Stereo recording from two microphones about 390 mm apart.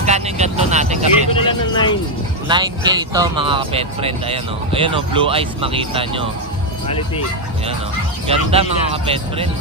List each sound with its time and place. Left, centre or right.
0.0 s vehicle: centre
1.5 s speech: centre
2.4 s speech: centre
8.3 s speech: centre